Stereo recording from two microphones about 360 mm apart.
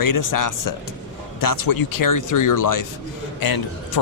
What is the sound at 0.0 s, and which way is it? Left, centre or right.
Speech, left.